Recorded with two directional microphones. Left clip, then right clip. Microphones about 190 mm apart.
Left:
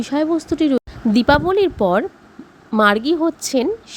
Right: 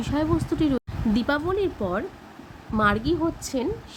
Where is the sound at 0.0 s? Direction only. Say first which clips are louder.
Left 6 dB; 30° left (ahead or behind).